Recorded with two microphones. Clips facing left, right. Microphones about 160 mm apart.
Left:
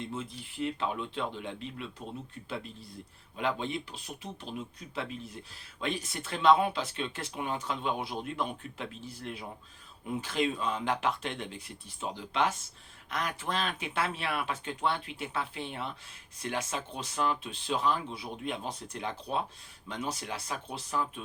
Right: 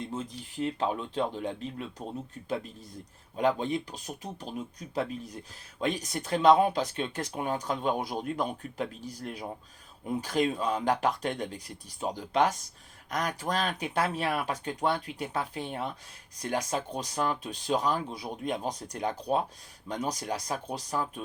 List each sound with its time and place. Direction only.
0.0 s speech: 40° right (ahead or behind)
3.3 s speech: 40° right (ahead or behind)